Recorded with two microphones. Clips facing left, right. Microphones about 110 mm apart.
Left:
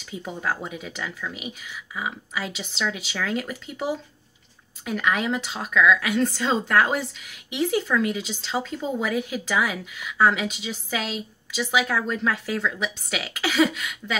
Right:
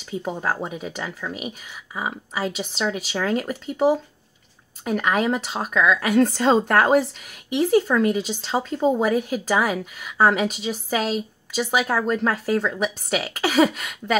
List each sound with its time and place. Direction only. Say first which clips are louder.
0.1 s a woman's voice: right 3 dB; 35° right (ahead or behind)